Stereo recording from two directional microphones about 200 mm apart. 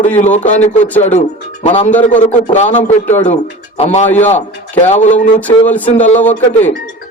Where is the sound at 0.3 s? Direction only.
35° left (ahead or behind).